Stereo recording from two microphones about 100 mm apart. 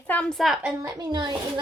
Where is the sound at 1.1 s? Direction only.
50° right (ahead or behind).